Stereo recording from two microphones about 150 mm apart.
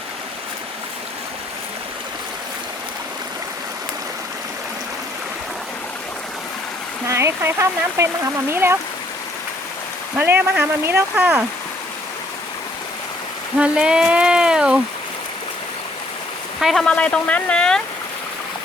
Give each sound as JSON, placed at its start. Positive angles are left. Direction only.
{"t": 7.1, "sound": "speech", "side_deg": -20}
{"t": 10.2, "sound": "speech", "side_deg": -15}
{"t": 13.6, "sound": "a sound", "side_deg": -5}
{"t": 16.6, "sound": "speech", "side_deg": 0}